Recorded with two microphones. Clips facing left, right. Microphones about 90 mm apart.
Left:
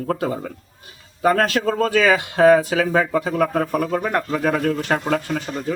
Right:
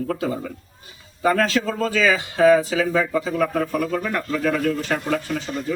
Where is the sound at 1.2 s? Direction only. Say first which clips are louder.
Left 2 dB; 55° left (ahead or behind).